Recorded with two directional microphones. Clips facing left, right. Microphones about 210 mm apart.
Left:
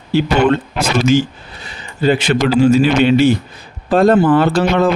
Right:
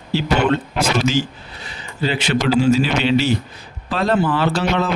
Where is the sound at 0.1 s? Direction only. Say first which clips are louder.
Left 5 dB; 50° left (ahead or behind).